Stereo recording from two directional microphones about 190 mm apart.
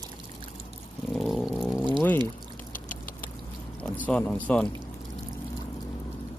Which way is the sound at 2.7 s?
45° left (ahead or behind).